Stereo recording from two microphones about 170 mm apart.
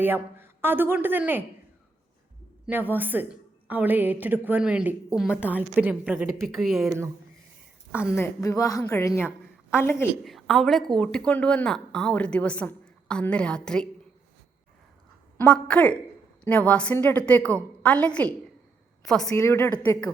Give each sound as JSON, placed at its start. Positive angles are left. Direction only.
{"t": 0.0, "sound": "a woman's voice", "side_deg": -15}
{"t": 2.6, "sound": "a woman's voice", "side_deg": -10}
{"t": 8.1, "sound": "a woman's voice", "side_deg": 15}
{"t": 10.2, "sound": "a woman's voice", "side_deg": 0}
{"t": 15.4, "sound": "a woman's voice", "side_deg": 5}
{"t": 19.4, "sound": "a woman's voice", "side_deg": 15}